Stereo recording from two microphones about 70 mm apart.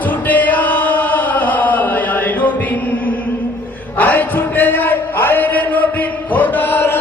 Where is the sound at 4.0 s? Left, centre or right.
Left.